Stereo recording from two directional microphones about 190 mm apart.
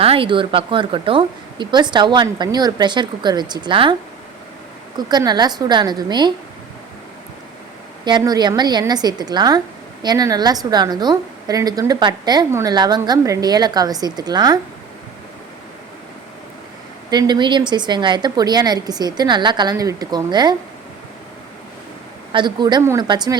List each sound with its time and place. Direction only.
0.0 s a woman's voice: 30° right (ahead or behind)
4.9 s a woman's voice: 20° right (ahead or behind)
8.0 s a woman's voice: 20° right (ahead or behind)
17.1 s a woman's voice: 20° right (ahead or behind)
22.3 s a woman's voice: 25° right (ahead or behind)